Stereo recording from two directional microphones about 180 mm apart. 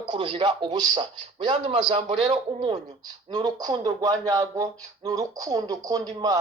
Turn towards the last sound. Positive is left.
turn(degrees=-20)  # may be behind; listen again after turning